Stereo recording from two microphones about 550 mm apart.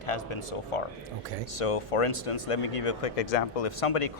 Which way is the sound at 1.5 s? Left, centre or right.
Left.